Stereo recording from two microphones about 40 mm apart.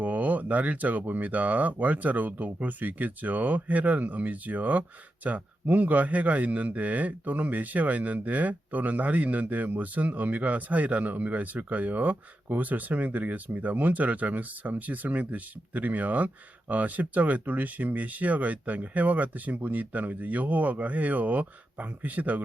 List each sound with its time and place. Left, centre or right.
0.0 s speech: right